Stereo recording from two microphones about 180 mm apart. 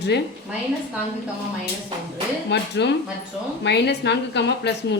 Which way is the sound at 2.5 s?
70° left (ahead or behind).